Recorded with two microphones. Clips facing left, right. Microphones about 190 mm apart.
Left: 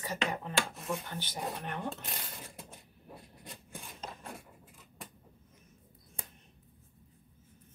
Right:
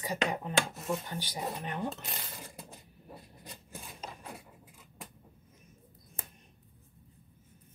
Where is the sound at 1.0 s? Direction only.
10° right (ahead or behind).